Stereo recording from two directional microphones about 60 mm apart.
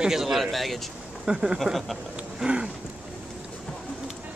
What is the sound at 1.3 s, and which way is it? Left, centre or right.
Speech, centre.